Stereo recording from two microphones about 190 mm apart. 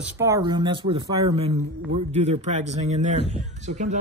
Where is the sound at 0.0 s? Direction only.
15° right (ahead or behind).